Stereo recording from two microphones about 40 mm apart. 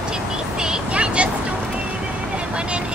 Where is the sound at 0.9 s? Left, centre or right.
Right.